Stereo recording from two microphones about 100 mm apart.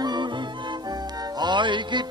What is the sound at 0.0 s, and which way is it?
Music, 50° right (ahead or behind).